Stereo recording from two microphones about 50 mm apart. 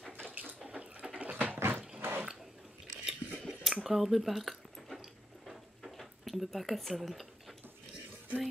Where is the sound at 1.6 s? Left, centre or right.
Right.